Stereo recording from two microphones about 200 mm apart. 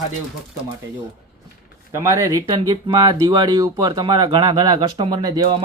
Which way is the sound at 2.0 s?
15° right (ahead or behind).